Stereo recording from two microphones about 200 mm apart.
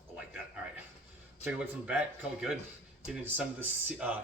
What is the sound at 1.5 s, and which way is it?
Speech, 5° right (ahead or behind).